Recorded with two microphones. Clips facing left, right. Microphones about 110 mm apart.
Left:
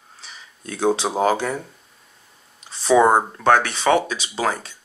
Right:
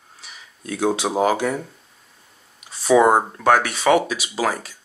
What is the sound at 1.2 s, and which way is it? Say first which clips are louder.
Speech: right 2 dB; 30° left (ahead or behind).